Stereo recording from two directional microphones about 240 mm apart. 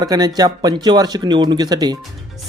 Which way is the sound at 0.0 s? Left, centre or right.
Centre.